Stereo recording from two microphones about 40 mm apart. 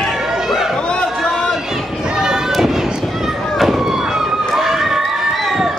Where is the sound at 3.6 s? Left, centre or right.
Centre.